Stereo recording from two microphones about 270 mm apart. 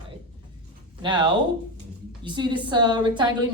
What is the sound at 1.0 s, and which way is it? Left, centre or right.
A woman's voice, centre.